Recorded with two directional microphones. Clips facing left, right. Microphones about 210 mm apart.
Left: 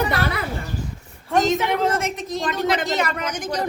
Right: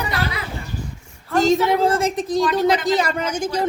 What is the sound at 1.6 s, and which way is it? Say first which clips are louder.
A woman's voice: right 4 dB; 35° right (ahead or behind).